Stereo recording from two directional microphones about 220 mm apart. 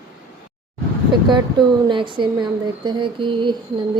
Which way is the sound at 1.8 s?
20° right (ahead or behind).